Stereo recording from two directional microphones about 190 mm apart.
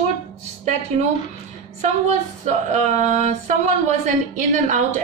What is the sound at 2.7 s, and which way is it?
A woman's voice, 40° right (ahead or behind).